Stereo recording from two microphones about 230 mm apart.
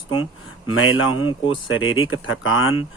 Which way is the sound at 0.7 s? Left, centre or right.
Left.